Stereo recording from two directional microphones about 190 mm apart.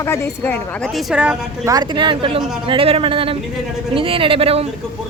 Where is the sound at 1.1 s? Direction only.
5° right (ahead or behind).